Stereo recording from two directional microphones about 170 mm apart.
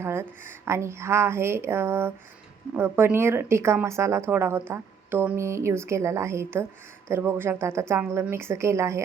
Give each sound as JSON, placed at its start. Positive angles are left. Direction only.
{"t": 0.0, "sound": "speech", "side_deg": -15}